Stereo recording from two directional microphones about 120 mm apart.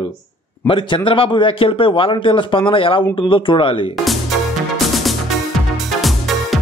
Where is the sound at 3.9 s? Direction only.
Centre (ahead or behind).